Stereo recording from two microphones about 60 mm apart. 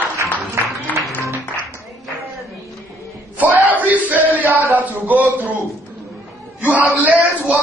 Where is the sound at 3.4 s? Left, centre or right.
Right.